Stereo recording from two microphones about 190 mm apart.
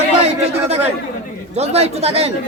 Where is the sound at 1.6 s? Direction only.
35° right (ahead or behind).